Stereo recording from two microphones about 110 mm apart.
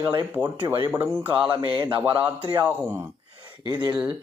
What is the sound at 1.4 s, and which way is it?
Speech, 45° right (ahead or behind).